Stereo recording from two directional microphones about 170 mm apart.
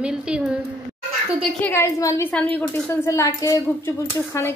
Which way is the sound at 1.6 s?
15° left (ahead or behind).